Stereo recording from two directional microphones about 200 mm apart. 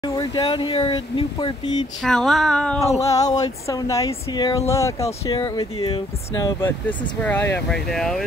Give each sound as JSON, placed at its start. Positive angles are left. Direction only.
{"t": 0.1, "sound": "speech", "side_deg": 20}
{"t": 2.0, "sound": "a sound", "side_deg": 0}
{"t": 3.0, "sound": "speech", "side_deg": 15}
{"t": 5.3, "sound": "speech", "side_deg": 25}
{"t": 6.9, "sound": "speech", "side_deg": 10}